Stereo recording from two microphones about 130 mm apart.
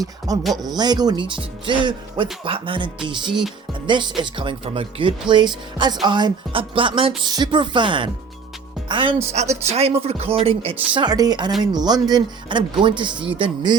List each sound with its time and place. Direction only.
0.5 s speech: 30° right (ahead or behind)
9.3 s speech: 60° right (ahead or behind); by 13.7 s 35° right (ahead or behind)